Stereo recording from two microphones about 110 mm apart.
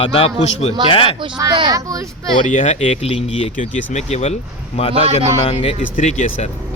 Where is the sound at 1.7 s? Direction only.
30° right (ahead or behind).